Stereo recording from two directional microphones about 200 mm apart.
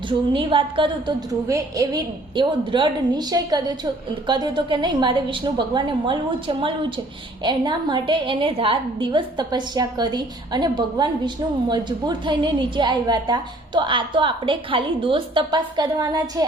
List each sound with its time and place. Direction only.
0.1 s a woman's voice: 25° right (ahead or behind)